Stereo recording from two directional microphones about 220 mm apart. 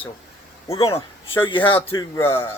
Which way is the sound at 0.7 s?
25° left (ahead or behind).